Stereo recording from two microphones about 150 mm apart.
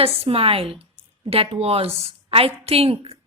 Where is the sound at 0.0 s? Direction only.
40° right (ahead or behind).